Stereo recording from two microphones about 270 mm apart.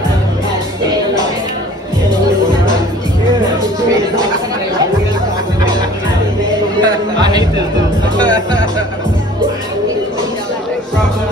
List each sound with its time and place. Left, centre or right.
6.8 s music: centre